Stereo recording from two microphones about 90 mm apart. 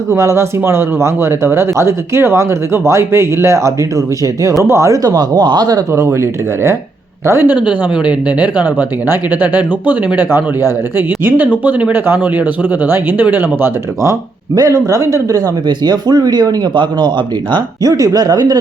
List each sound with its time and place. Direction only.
0.1 s speech: 30° right (ahead or behind); by 5.8 s 50° right (ahead or behind)
5.9 s speech: 30° right (ahead or behind)
7.6 s speech: 15° right (ahead or behind)
14.0 s speech: 40° right (ahead or behind)
15.6 s speech: 50° right (ahead or behind)
17.5 s speech: 40° right (ahead or behind)